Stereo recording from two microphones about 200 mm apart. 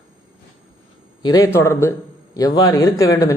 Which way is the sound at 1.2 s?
20° left (ahead or behind).